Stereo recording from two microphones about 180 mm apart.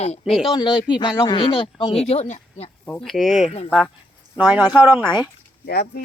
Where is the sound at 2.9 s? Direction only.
5° left (ahead or behind).